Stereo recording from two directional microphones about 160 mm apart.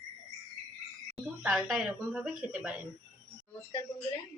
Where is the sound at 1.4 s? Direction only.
Centre (ahead or behind).